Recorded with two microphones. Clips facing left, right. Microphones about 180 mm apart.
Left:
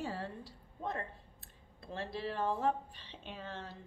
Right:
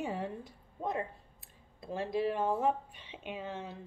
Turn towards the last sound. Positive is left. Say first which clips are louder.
# right 5 dB
turn(degrees=-10)  # may be behind; listen again after turning